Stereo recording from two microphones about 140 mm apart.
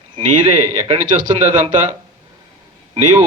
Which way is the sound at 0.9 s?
35° right (ahead or behind).